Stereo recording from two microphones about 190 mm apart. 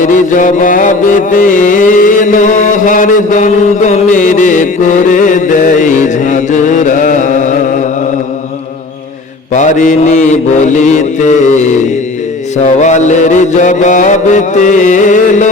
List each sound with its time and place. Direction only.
0.0 s music: 40° left (ahead or behind)
9.5 s mantra: 40° left (ahead or behind)
12.6 s mantra: 40° left (ahead or behind)